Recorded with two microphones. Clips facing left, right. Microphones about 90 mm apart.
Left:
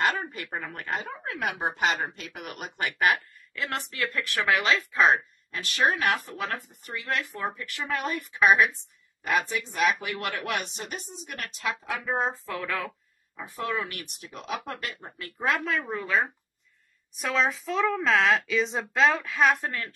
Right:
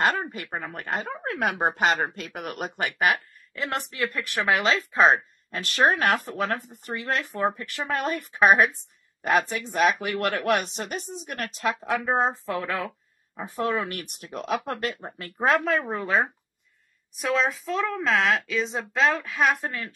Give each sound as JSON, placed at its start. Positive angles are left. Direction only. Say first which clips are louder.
{"t": 0.0, "sound": "a sound", "louder": "right 2 dB", "side_deg": -35}
{"t": 0.5, "sound": "speech", "louder": "right 2 dB", "side_deg": -25}
{"t": 1.2, "sound": "speech", "louder": "right 7 dB", "side_deg": -55}
{"t": 3.1, "sound": "speech", "louder": "right 1 dB", "side_deg": -20}
{"t": 10.2, "sound": "speech", "louder": "right 8 dB", "side_deg": -55}
{"t": 14.4, "sound": "speech", "louder": "right 6 dB", "side_deg": -60}
{"t": 14.8, "sound": "speech", "louder": "right 6 dB", "side_deg": -30}
{"t": 17.1, "sound": "speech", "louder": "right 2 dB", "side_deg": 0}